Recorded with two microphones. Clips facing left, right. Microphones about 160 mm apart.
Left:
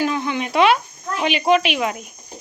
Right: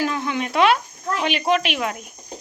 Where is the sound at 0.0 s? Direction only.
Centre (ahead or behind).